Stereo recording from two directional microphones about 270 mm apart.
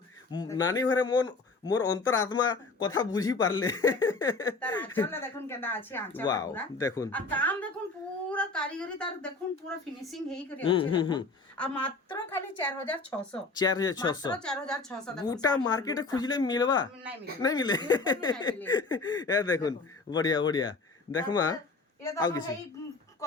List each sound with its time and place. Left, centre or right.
0.3 s a woman's voice: centre
10.6 s a woman's voice: centre
11.5 s a woman's voice: centre
14.3 s a woman's voice: centre
15.2 s speech: centre